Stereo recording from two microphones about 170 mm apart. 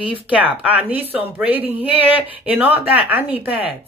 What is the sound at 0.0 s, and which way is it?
Speech, 10° right (ahead or behind).